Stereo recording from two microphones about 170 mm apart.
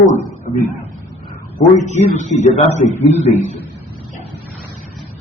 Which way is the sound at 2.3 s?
40° left (ahead or behind).